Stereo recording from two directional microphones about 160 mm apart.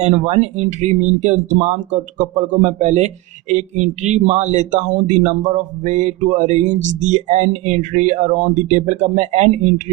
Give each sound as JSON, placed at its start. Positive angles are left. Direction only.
{"t": 0.0, "sound": "speech", "side_deg": -45}